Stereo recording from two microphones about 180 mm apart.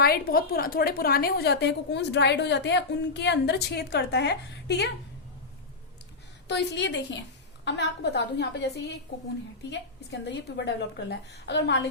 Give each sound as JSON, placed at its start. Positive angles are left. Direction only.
{"t": 0.0, "sound": "a woman's voice", "side_deg": 55}
{"t": 6.5, "sound": "a woman's voice", "side_deg": 75}